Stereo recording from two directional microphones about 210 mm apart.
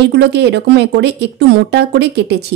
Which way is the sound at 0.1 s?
55° right (ahead or behind).